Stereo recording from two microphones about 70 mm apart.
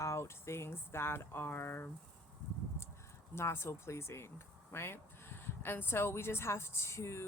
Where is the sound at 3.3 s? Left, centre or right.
Left.